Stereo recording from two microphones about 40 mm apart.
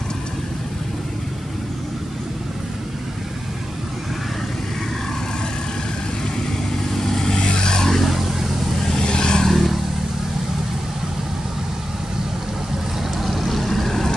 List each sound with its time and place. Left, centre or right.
6.9 s vehicle: centre
7.9 s vehicle: centre
8.8 s vehicle: centre
9.5 s vehicle: centre
13.2 s vehicle: centre